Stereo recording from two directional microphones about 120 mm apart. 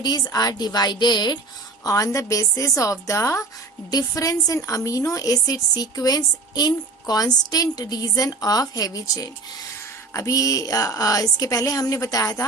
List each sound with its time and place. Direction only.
0.0 s a woman's voice: 35° left (ahead or behind)